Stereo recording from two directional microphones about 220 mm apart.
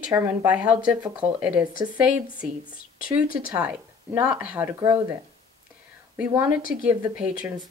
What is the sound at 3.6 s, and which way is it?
Speech, 5° right (ahead or behind).